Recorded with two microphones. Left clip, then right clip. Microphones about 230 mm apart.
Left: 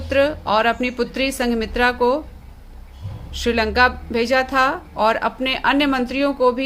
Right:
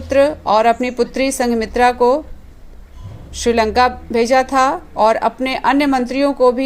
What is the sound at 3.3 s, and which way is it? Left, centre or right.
A woman's voice, centre.